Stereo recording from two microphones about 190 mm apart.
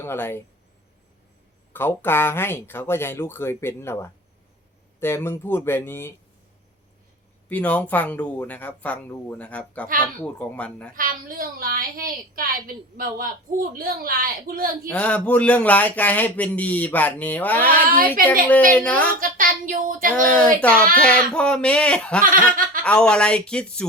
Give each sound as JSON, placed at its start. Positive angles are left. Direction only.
{"t": 0.0, "sound": "speech", "side_deg": 10}
{"t": 1.7, "sound": "speech", "side_deg": 10}
{"t": 7.4, "sound": "speech", "side_deg": 5}
{"t": 10.9, "sound": "a woman's voice", "side_deg": -50}
{"t": 14.8, "sound": "speech", "side_deg": 5}
{"t": 19.2, "sound": "a woman's voice", "side_deg": -45}
{"t": 20.2, "sound": "speech", "side_deg": 5}
{"t": 22.2, "sound": "a woman's voice", "side_deg": -45}
{"t": 22.8, "sound": "speech", "side_deg": 5}